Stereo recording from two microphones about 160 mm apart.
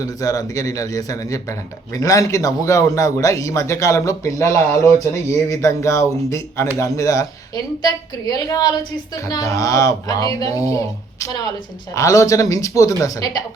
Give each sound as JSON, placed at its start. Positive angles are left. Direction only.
{"t": 0.0, "sound": "speech", "side_deg": 20}